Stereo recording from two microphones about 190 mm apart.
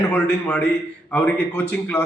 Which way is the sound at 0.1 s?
10° left (ahead or behind).